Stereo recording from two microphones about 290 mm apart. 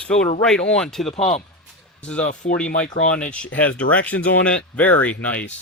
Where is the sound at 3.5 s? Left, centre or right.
Centre.